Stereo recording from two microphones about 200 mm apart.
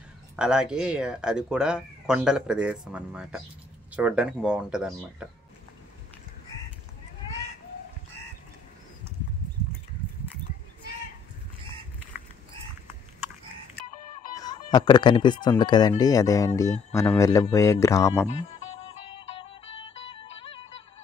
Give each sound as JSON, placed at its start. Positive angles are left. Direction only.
{"t": 0.4, "sound": "speech", "side_deg": -5}
{"t": 14.3, "sound": "cat", "side_deg": 20}
{"t": 15.4, "sound": "speech", "side_deg": 20}
{"t": 18.8, "sound": "music", "side_deg": 25}